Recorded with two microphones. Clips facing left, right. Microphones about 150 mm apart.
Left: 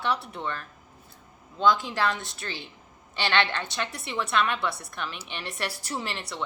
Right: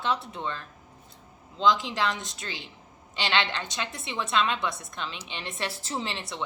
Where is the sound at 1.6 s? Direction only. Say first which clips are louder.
Left 1 dB; 15° right (ahead or behind).